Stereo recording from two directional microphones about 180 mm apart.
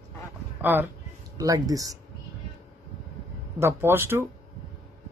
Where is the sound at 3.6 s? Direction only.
15° right (ahead or behind).